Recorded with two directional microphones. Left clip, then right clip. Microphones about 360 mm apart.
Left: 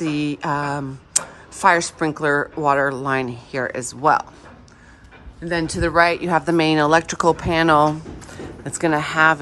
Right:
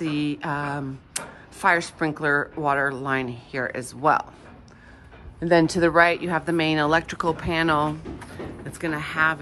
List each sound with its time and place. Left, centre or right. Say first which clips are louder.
0.0 s speech: left 4 dB; centre
5.4 s a woman's voice: right 3 dB; centre